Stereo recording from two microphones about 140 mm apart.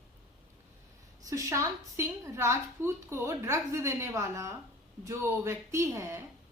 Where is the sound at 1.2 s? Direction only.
20° right (ahead or behind).